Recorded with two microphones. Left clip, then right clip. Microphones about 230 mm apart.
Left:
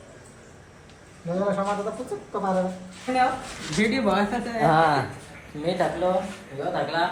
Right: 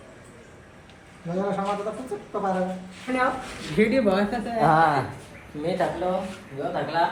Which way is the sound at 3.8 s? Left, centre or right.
Centre.